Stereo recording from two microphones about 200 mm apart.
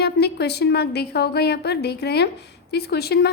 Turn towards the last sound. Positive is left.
turn(degrees=55)  # may be behind; listen again after turning